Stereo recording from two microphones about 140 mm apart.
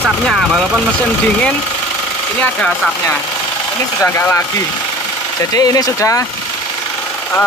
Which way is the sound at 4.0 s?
20° left (ahead or behind).